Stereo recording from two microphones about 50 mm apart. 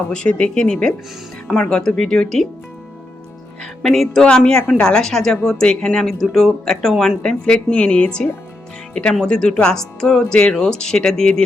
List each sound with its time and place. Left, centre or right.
0.1 s a woman's voice: centre
3.8 s a woman's voice: centre
5.0 s speech: centre
7.2 s a woman's voice: centre